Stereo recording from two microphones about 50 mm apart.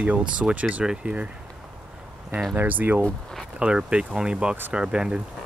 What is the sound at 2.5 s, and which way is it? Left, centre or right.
Speech, right.